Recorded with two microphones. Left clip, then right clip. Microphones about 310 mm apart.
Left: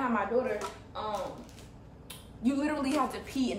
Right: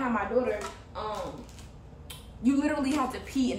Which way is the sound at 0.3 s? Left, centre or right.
Centre.